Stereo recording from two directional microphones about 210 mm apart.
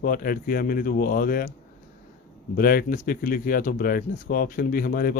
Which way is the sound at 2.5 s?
40° left (ahead or behind).